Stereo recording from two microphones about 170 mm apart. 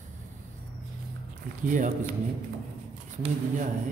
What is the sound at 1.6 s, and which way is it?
Speech, 50° right (ahead or behind).